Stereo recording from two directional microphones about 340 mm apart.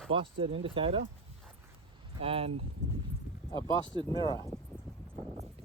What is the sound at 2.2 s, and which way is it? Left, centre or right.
Speech, centre.